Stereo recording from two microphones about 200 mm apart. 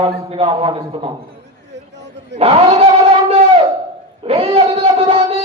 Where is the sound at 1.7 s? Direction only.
60° right (ahead or behind).